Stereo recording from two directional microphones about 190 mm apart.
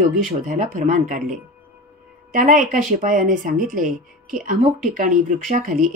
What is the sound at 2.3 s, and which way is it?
Speech, 45° right (ahead or behind).